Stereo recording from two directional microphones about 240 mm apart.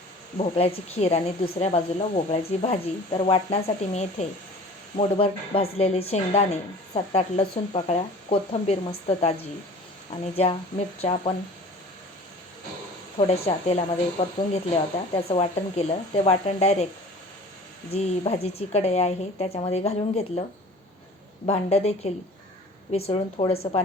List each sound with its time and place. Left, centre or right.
0.3 s speech: left
10.3 s speech: left
13.1 s speech: left
17.9 s speech: left
21.4 s speech: left